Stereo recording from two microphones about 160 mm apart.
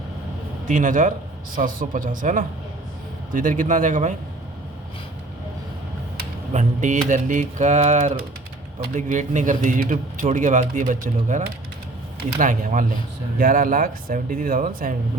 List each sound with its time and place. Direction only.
0.7 s speech: 55° right (ahead or behind)
6.5 s speech: 50° right (ahead or behind)